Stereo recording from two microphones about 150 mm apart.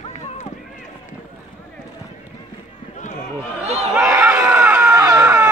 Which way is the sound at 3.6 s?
45° right (ahead or behind).